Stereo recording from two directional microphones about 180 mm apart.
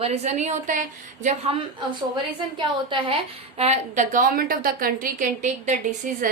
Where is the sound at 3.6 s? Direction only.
40° right (ahead or behind).